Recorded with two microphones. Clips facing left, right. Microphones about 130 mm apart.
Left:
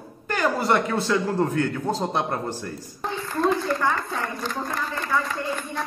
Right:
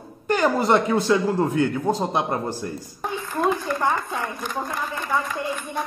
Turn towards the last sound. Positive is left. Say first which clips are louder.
# right 1 dB
turn(degrees=-15)  # may be behind; listen again after turning